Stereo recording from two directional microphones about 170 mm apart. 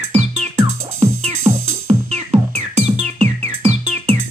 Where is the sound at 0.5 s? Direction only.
20° right (ahead or behind).